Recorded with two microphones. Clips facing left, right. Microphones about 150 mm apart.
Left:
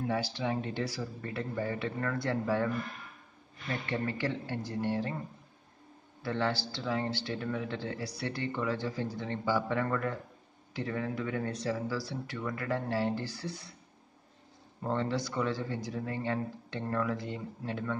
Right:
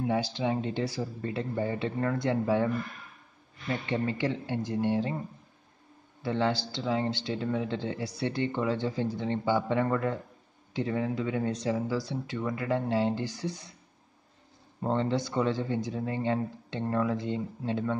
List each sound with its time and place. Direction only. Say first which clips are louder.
0.0 s speech: right 4 dB; 20° right (ahead or behind)
6.2 s speech: right 4 dB; 20° right (ahead or behind)
14.8 s speech: right 4 dB; 25° right (ahead or behind)